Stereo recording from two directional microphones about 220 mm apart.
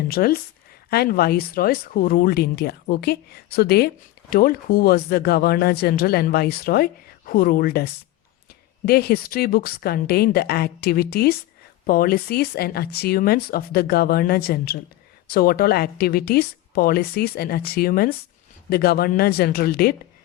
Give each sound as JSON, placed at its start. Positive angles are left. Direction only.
{"t": 0.1, "sound": "speech", "side_deg": 45}